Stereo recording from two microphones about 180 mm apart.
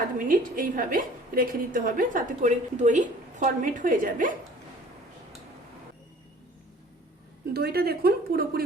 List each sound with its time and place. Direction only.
0.3 s a woman's voice: 50° right (ahead or behind)
7.5 s speech: 60° right (ahead or behind)